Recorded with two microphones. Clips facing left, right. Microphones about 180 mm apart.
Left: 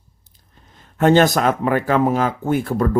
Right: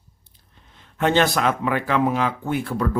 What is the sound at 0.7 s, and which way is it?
Speech, 45° left (ahead or behind).